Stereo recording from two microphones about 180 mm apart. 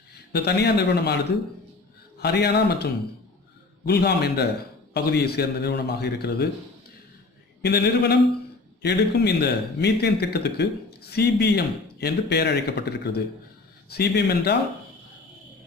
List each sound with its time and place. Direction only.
0.3 s a man's voice: 65° left (ahead or behind)
7.6 s a man's voice: 65° left (ahead or behind)